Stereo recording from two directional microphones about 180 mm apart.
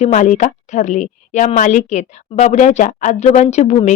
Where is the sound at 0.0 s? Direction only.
45° left (ahead or behind).